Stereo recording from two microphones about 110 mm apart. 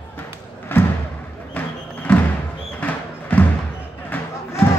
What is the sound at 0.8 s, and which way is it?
Thump, 20° left (ahead or behind).